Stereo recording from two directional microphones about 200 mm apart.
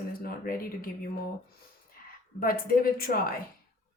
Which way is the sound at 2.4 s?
45° left (ahead or behind).